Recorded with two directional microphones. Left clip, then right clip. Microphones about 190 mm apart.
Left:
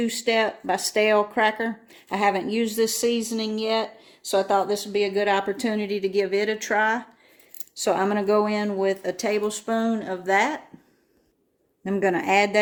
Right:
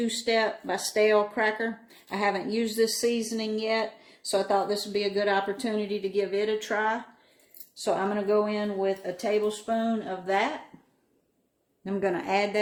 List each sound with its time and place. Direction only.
0.0 s speech: 40° left (ahead or behind); by 10.5 s 60° left (ahead or behind)
11.9 s speech: 50° left (ahead or behind)